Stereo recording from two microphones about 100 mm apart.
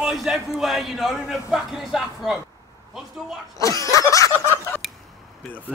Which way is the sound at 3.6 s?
35° left (ahead or behind).